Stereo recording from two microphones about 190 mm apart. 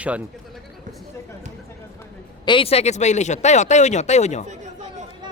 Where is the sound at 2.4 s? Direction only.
25° left (ahead or behind).